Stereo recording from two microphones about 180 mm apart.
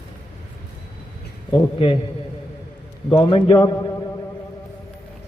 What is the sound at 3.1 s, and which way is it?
Speech, 25° left (ahead or behind).